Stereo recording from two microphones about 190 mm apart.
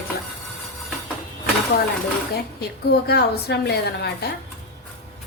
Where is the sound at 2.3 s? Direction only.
55° left (ahead or behind).